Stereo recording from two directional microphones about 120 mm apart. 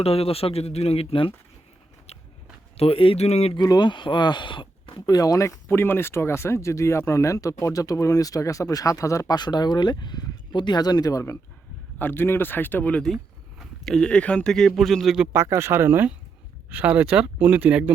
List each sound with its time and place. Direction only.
0.0 s speech: 55° left (ahead or behind)
2.7 s speech: 50° left (ahead or behind)
3.5 s speech: 35° left (ahead or behind); by 15.3 s 5° right (ahead or behind)
15.3 s speech: 20° right (ahead or behind)